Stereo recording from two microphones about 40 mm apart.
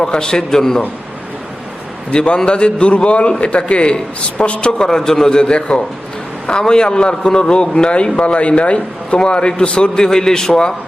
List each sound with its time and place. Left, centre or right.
0.0 s a man's voice: centre
2.0 s a man's voice: left
4.8 s a man's voice: centre